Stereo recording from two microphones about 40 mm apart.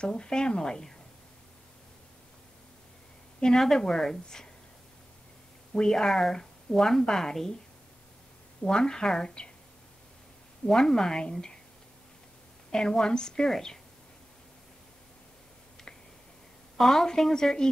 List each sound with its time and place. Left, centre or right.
0.0 s speech: left
3.5 s speech: centre
5.7 s speech: centre
8.6 s speech: centre
10.7 s speech: centre
12.7 s speech: centre
16.7 s speech: centre